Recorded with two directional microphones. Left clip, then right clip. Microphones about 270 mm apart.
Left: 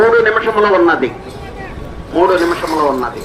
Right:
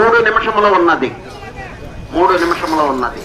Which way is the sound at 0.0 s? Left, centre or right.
Centre.